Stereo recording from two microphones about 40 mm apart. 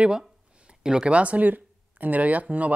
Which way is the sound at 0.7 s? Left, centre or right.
Right.